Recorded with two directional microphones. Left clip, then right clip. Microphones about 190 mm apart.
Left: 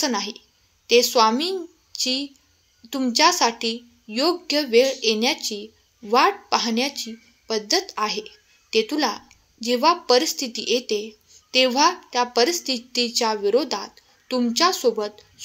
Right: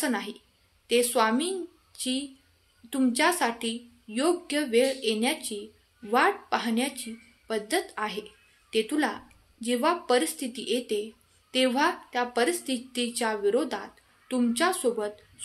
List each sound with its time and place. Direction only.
0.0 s a woman's voice: 20° left (ahead or behind)